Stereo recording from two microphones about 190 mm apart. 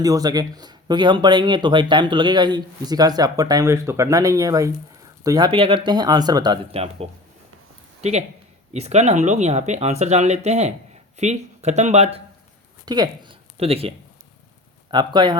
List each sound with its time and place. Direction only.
0.0 s speech: 20° right (ahead or behind)
8.7 s speech: 35° right (ahead or behind)
12.8 s speech: 20° right (ahead or behind)
13.6 s speech: 30° right (ahead or behind)